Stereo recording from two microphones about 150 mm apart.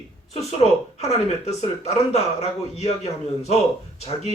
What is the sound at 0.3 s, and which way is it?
Speech, 45° left (ahead or behind).